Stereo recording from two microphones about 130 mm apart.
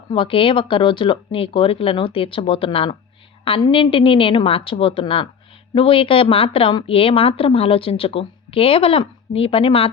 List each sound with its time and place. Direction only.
0.1 s a woman's voice: 45° left (ahead or behind)